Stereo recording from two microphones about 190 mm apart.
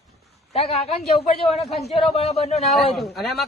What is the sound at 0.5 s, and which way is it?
Speech, 30° left (ahead or behind).